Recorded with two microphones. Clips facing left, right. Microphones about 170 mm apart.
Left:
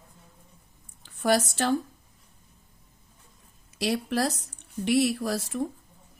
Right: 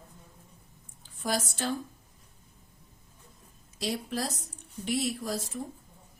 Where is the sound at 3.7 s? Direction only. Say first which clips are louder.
Left 6 dB; 70° left (ahead or behind).